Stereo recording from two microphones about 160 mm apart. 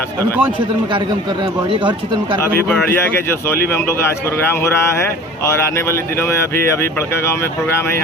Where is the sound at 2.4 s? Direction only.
15° left (ahead or behind).